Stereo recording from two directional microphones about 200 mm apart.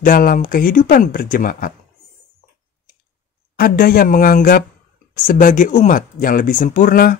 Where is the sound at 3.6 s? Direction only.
50° left (ahead or behind).